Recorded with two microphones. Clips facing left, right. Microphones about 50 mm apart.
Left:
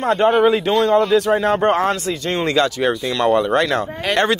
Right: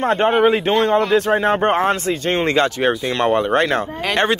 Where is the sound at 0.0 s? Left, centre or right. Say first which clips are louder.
Left 1 dB; right.